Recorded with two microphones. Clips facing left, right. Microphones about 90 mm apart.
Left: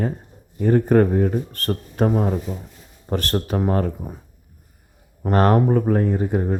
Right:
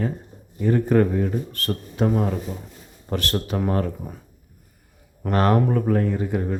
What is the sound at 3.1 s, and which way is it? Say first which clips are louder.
Speech: left 2 dB; 40° left (ahead or behind).